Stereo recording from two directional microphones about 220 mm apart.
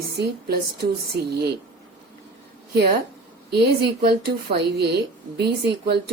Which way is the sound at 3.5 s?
50° right (ahead or behind).